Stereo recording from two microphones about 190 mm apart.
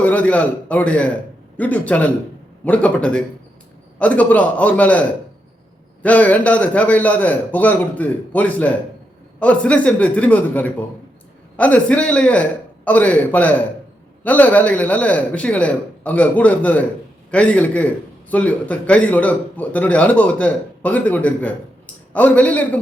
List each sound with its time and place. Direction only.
0.0 s a man's voice: 10° left (ahead or behind)